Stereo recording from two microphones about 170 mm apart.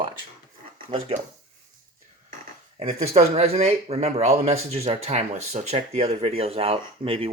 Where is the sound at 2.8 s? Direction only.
40° right (ahead or behind).